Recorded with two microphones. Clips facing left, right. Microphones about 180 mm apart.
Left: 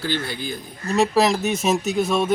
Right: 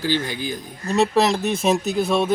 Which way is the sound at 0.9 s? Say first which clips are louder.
Even; centre (ahead or behind).